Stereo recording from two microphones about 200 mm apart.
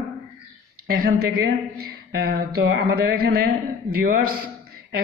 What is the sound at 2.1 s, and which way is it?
A man's voice, 55° right (ahead or behind).